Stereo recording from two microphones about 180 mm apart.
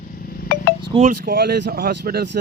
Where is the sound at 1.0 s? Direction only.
50° right (ahead or behind).